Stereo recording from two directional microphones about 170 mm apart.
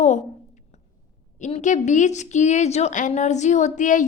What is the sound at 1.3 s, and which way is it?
A woman's voice, 45° left (ahead or behind).